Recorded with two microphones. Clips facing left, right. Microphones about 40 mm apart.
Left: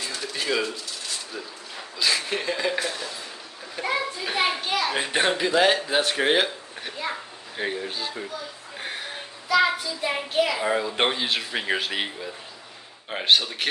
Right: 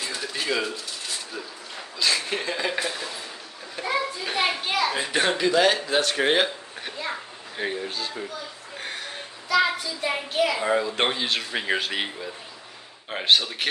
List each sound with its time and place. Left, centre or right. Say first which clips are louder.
0.0 s pigeon: even; centre
2.0 s speech: even; centre
3.8 s children playing: left 1 dB; centre
4.2 s a man's voice: left 1 dB; centre
4.8 s a child's voice: right 1 dB; left
5.4 s a man's voice: right 1 dB; centre
6.2 s a child's voice: even; centre